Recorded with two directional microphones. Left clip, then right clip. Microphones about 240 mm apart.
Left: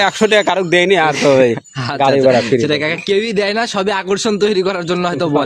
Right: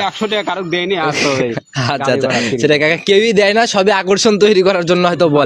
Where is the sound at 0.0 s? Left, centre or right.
Left.